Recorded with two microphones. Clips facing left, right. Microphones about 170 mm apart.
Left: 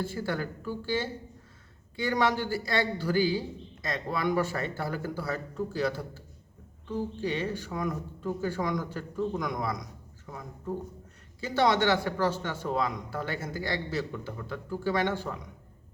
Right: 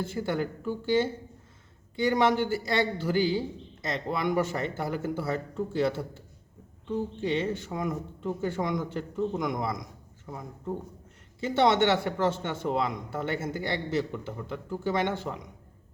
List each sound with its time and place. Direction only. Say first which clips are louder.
0.0 s a man's voice: right 2 dB; 20° right (ahead or behind)
11.3 s a man's voice: right 2 dB; 25° right (ahead or behind)